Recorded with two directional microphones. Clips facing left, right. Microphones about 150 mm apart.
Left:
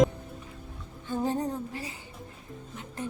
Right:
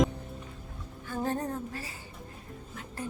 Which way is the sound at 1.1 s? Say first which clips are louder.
Left 3 dB; 15° left (ahead or behind).